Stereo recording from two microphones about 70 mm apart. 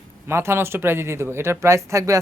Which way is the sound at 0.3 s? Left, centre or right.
Right.